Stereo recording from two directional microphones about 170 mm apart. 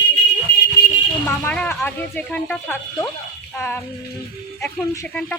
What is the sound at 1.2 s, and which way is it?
Speech, 10° left (ahead or behind).